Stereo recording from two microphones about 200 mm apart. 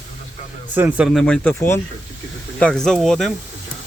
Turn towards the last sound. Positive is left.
turn(degrees=0)  # may be behind; listen again after turning